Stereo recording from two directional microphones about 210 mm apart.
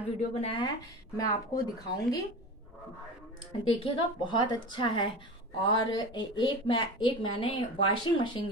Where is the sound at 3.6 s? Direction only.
25° left (ahead or behind).